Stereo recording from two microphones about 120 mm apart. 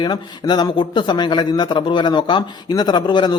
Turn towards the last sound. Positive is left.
turn(degrees=35)  # may be behind; listen again after turning